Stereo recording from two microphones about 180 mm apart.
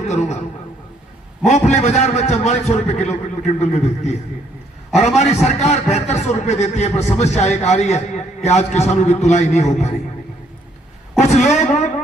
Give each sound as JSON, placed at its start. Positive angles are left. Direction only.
{"t": 0.1, "sound": "a man's voice", "side_deg": 40}
{"t": 1.5, "sound": "a man's voice", "side_deg": 40}
{"t": 11.2, "sound": "a sound", "side_deg": 40}